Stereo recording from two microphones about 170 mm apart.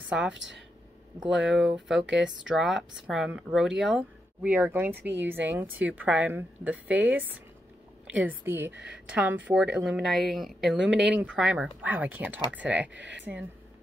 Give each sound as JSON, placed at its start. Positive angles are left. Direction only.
{"t": 0.1, "sound": "speech", "side_deg": -5}
{"t": 0.4, "sound": "speech", "side_deg": -90}
{"t": 1.4, "sound": "a woman's voice", "side_deg": -5}
{"t": 8.7, "sound": "speech", "side_deg": -80}
{"t": 9.1, "sound": "a woman's voice", "side_deg": -10}